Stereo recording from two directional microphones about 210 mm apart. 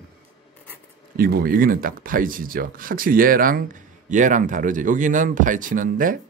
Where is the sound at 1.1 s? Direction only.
45° right (ahead or behind).